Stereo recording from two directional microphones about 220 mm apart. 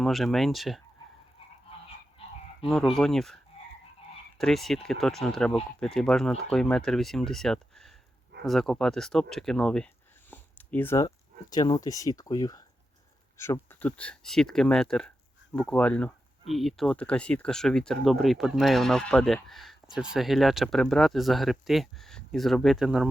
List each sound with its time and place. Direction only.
0.0 s speech: centre (ahead or behind)
2.6 s speech: centre (ahead or behind)
4.4 s speech: centre (ahead or behind)